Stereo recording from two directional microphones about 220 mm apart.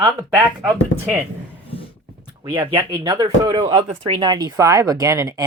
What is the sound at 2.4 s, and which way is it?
Speech, 20° right (ahead or behind).